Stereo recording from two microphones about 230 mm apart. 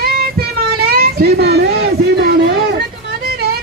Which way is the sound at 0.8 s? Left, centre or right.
Right.